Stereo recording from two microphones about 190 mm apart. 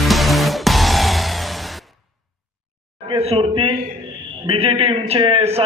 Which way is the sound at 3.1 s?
30° right (ahead or behind).